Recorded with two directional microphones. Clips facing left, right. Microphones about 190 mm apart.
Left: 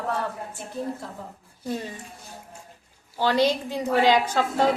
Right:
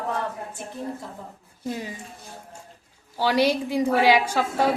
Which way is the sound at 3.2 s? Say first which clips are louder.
Right 1 dB; 10° right (ahead or behind).